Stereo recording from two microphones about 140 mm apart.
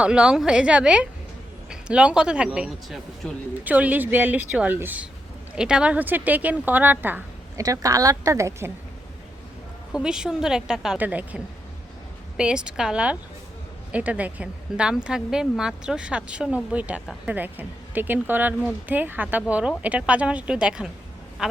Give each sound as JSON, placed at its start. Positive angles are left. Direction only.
{"t": 0.0, "sound": "a woman's voice", "side_deg": -5}
{"t": 7.6, "sound": "a woman's voice", "side_deg": -25}
{"t": 9.9, "sound": "a woman's voice", "side_deg": -5}